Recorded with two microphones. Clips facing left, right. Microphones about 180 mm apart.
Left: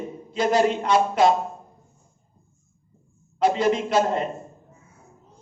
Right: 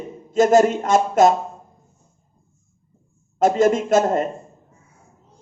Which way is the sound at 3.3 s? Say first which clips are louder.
Right 4 dB; 45° right (ahead or behind).